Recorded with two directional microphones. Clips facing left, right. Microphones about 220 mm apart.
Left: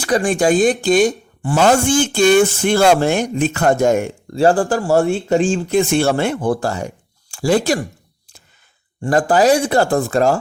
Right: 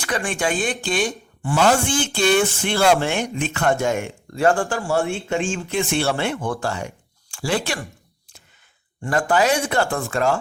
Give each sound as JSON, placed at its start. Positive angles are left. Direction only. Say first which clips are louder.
{"t": 0.0, "sound": "a woman's voice", "louder": "left 8 dB", "side_deg": 35}
{"t": 9.0, "sound": "a woman's voice", "louder": "left 5 dB", "side_deg": 35}